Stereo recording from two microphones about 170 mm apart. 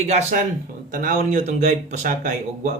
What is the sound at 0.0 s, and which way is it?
Speech, 40° right (ahead or behind).